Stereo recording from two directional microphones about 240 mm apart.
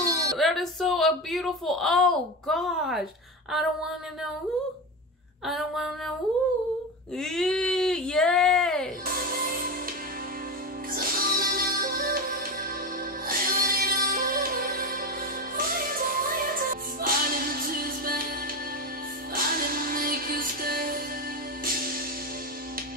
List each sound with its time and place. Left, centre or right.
0.0 s a sound: right
0.4 s speech: centre
5.5 s speech: centre
7.2 s speech: centre
9.0 s music: right
11.0 s music: right
19.3 s music: right